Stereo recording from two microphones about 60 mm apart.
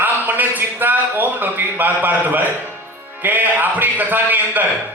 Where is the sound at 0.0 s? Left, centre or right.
Right.